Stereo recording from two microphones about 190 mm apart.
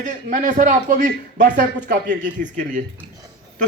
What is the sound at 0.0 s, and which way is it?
A man's voice, 40° right (ahead or behind).